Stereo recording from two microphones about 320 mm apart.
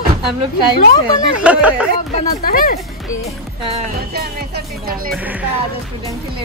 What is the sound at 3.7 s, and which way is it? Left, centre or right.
Speech, right.